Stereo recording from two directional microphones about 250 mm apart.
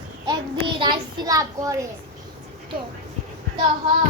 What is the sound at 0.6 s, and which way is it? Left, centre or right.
A child's voice, centre.